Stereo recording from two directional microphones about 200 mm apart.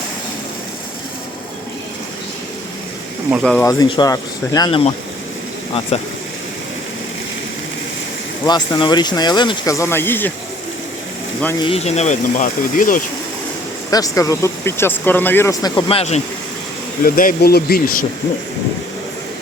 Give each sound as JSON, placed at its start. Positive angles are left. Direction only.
{"t": 3.4, "sound": "speech", "side_deg": 5}
{"t": 3.7, "sound": "speech", "side_deg": 20}
{"t": 8.4, "sound": "speech", "side_deg": 20}
{"t": 11.4, "sound": "speech", "side_deg": 20}
{"t": 13.9, "sound": "speech", "side_deg": 15}
{"t": 17.0, "sound": "speech", "side_deg": 45}